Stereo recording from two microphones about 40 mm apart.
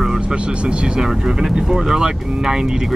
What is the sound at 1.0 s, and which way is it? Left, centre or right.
Speech, centre.